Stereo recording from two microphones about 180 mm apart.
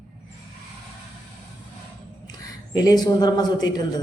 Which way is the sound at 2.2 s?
20° left (ahead or behind).